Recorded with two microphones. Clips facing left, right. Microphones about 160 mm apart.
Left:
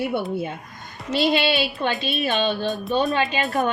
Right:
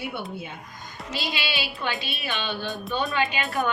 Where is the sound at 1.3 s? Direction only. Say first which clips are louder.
Left 12 dB; 55° left (ahead or behind).